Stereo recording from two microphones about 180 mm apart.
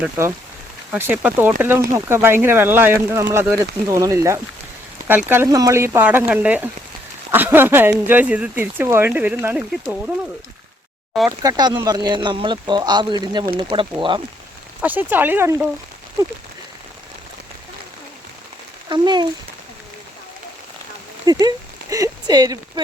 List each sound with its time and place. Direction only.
0.0 s speech: 15° right (ahead or behind)
11.3 s speech: 20° right (ahead or behind)
14.8 s speech: 10° right (ahead or behind)
18.9 s speech: 25° right (ahead or behind)
21.2 s speech: 20° right (ahead or behind)